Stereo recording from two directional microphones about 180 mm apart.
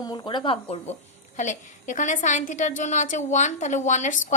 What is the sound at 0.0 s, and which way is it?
Speech, 20° left (ahead or behind).